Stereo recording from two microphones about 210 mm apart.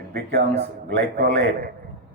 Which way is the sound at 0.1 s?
50° right (ahead or behind).